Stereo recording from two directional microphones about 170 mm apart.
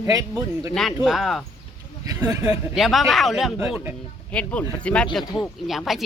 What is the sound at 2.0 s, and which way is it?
Speech, 20° right (ahead or behind).